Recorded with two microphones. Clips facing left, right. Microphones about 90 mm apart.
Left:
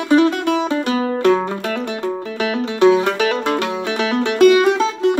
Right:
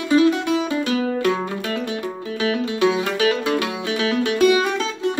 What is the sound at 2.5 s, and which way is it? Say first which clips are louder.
Music: left 8 dB; 30° left (ahead or behind).